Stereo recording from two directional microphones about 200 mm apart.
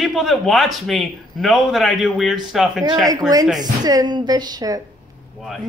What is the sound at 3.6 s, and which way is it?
A woman's voice, 20° right (ahead or behind).